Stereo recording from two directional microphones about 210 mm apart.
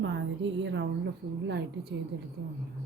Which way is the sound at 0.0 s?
55° right (ahead or behind).